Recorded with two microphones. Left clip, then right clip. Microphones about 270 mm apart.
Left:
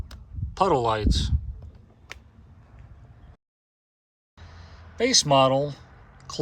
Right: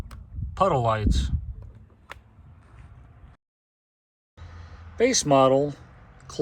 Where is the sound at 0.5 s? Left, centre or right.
Centre.